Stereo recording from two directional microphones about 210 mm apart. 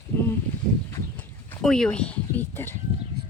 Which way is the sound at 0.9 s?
10° left (ahead or behind).